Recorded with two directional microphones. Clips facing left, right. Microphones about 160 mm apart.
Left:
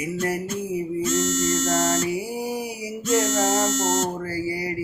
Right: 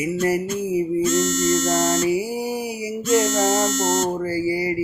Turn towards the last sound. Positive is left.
turn(degrees=-5)  # may be behind; listen again after turning